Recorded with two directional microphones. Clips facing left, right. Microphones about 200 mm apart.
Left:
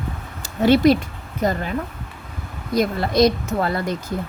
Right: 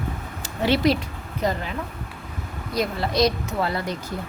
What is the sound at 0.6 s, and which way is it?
Speech, 45° left (ahead or behind).